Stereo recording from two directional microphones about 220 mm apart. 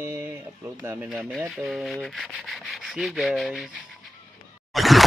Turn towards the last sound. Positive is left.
turn(degrees=0)  # may be behind; listen again after turning